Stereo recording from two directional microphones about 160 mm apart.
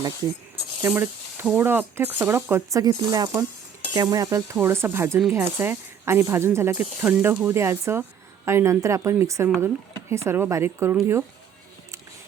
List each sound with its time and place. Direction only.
0.8 s speech: 15° right (ahead or behind)